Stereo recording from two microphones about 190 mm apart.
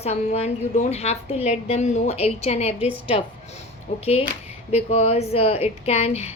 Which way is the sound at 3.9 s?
35° left (ahead or behind).